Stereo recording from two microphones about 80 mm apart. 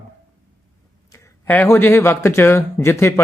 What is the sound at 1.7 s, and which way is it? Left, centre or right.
Speech, left.